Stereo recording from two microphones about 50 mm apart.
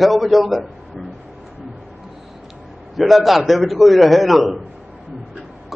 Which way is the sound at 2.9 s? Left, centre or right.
Centre.